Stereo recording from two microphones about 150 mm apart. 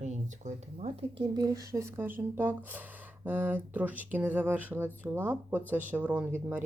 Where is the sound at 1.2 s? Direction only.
25° right (ahead or behind).